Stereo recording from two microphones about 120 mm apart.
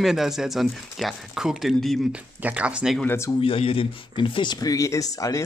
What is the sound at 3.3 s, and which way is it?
Speech, 50° left (ahead or behind).